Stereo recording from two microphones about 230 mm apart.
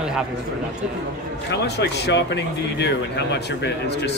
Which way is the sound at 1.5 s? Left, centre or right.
Left.